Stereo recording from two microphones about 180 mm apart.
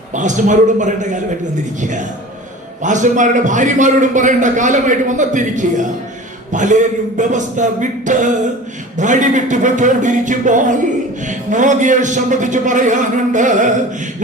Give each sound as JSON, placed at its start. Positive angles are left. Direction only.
{"t": 0.1, "sound": "a man's voice", "side_deg": -45}